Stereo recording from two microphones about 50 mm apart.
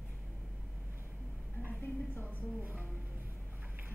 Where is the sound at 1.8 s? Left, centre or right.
Left.